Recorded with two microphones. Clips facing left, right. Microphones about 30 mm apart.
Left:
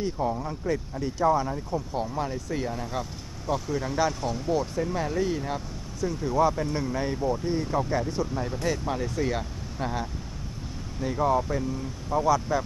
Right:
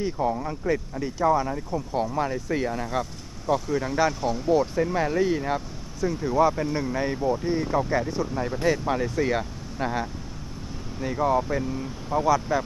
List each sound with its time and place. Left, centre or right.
0.0 s speech: centre